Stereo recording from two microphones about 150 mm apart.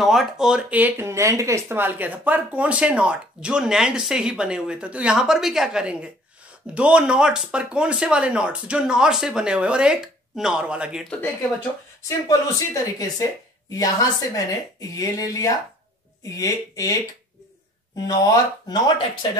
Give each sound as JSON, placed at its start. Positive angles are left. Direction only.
{"t": 0.0, "sound": "speech", "side_deg": 0}
{"t": 12.1, "sound": "speech", "side_deg": 20}